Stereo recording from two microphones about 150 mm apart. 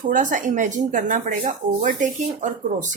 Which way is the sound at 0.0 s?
60° right (ahead or behind).